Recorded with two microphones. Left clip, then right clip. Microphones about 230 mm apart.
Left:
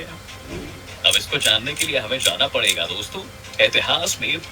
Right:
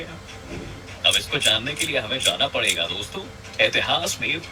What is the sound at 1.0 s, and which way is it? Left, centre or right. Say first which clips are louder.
Speech: left 2 dB; centre.